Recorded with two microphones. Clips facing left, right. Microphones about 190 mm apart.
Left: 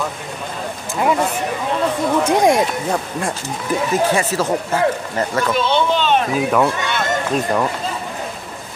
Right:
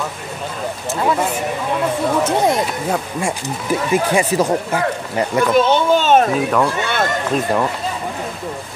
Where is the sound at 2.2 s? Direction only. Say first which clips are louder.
Left 5 dB; 10° left (ahead or behind).